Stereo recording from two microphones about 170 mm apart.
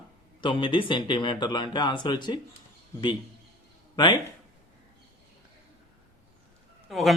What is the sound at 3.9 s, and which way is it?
Speech, 25° left (ahead or behind).